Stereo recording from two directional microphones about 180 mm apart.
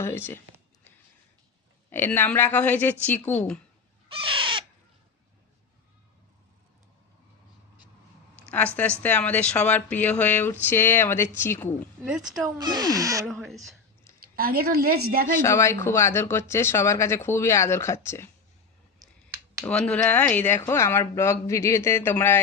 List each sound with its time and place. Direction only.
1.9 s speech: 10° left (ahead or behind)
4.1 s bird: 30° right (ahead or behind)
8.4 s speech: 10° left (ahead or behind)
12.0 s speech: 5° right (ahead or behind)
12.5 s speech: 20° right (ahead or behind)
13.2 s speech: centre (ahead or behind)
14.3 s a woman's voice: 55° right (ahead or behind)
15.4 s speech: 15° left (ahead or behind)
19.6 s speech: 5° left (ahead or behind)